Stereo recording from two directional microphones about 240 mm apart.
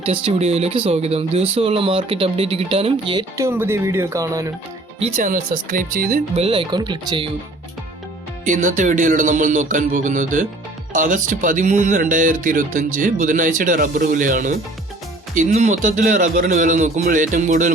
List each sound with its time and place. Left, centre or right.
0.0 s speech: right
4.9 s speech: right
8.4 s speech: right